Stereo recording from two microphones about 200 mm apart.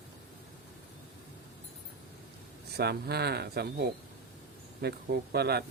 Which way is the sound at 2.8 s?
55° right (ahead or behind).